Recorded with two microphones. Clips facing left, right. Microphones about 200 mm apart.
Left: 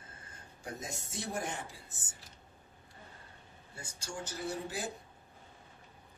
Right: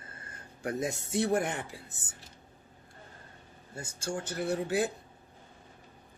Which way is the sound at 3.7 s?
50° right (ahead or behind).